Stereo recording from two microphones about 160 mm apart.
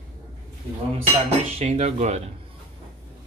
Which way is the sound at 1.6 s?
45° right (ahead or behind).